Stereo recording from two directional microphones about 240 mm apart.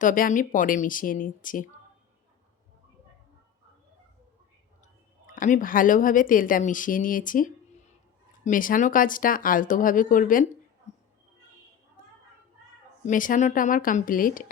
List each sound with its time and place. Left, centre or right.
0.0 s a woman's voice: left
5.2 s a woman's voice: left
10.9 s a sound: left
13.1 s a woman's voice: left